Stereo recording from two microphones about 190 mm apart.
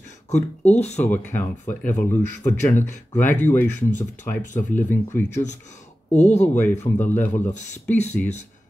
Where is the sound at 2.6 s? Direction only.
40° left (ahead or behind).